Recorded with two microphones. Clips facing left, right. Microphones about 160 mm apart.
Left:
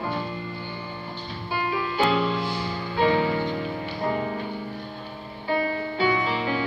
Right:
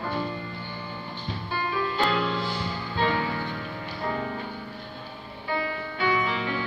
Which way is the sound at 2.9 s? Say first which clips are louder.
Left 6 dB; 20° left (ahead or behind).